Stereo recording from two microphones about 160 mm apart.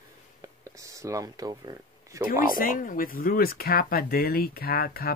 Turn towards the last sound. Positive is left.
turn(degrees=70)  # may be behind; listen again after turning